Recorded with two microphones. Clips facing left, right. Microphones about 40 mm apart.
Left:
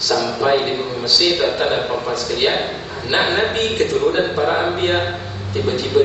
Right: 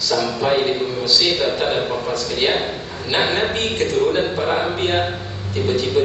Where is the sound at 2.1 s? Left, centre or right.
Left.